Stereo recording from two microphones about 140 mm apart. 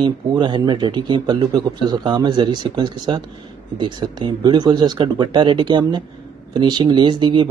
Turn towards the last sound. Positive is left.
turn(degrees=-35)  # may be behind; listen again after turning